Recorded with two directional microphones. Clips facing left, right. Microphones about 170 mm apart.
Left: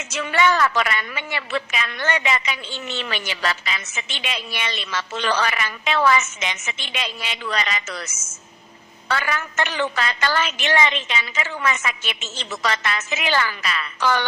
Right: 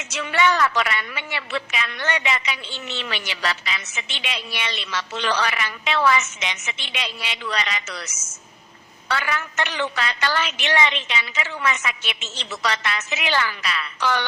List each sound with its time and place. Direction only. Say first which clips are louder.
0.0 s a woman's voice: left 1 dB; 45° left (ahead or behind)